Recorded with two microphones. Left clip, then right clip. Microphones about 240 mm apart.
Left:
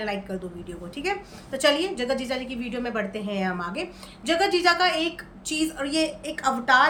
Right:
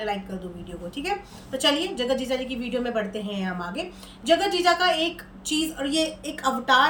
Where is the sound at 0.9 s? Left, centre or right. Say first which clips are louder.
Even; centre.